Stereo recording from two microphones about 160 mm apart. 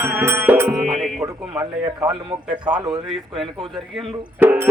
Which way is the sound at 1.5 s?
15° right (ahead or behind).